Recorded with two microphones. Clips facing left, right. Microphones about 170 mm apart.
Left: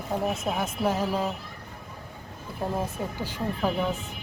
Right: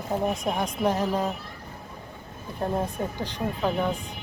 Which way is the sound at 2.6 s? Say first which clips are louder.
Right 2 dB; 5° left (ahead or behind).